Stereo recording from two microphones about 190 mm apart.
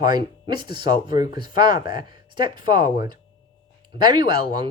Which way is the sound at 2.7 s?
45° left (ahead or behind).